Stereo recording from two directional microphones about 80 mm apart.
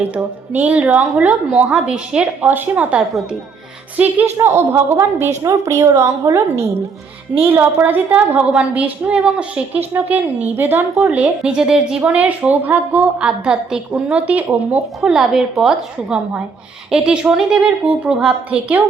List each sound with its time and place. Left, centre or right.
0.0 s a woman's voice: centre
4.4 s a woman's voice: right
7.4 s a woman's voice: right
15.0 s a woman's voice: centre